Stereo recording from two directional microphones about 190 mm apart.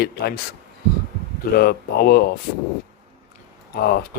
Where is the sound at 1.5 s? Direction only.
55° left (ahead or behind).